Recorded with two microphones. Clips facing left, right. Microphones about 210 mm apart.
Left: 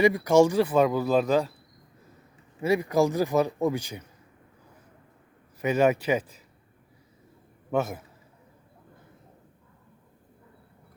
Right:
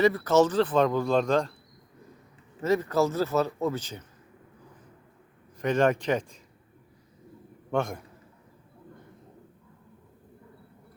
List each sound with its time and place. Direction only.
0.0 s speech: 15° left (ahead or behind)
2.6 s speech: 10° left (ahead or behind)
5.5 s speech: 5° left (ahead or behind)
7.7 s a man's voice: 5° left (ahead or behind)